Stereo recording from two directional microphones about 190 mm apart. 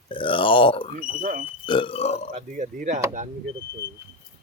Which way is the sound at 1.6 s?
25° left (ahead or behind).